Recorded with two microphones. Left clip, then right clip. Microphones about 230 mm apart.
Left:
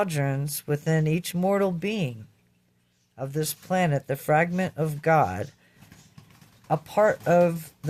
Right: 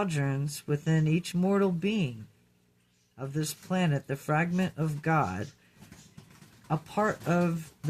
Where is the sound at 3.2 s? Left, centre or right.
Left.